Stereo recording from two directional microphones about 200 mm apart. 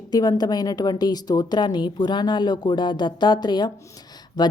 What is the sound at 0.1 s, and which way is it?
A woman's voice, 20° left (ahead or behind).